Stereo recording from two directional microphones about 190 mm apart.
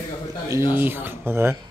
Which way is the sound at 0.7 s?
10° right (ahead or behind).